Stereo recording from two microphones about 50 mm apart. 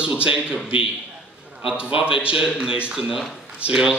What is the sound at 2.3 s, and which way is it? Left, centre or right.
Speech, centre.